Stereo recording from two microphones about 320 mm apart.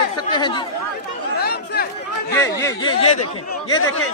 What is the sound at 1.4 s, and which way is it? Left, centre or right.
Chatter, left.